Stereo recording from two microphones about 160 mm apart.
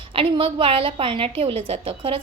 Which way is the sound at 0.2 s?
35° right (ahead or behind).